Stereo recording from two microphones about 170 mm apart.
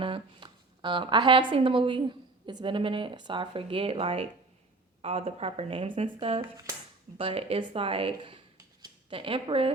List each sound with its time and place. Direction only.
0.0 s speech: 30° right (ahead or behind)
8.5 s scissors: 25° right (ahead or behind)